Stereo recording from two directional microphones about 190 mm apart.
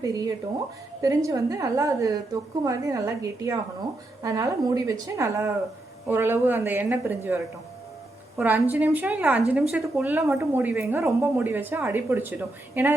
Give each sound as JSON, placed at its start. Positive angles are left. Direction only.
{"t": 0.0, "sound": "a woman's voice", "side_deg": -20}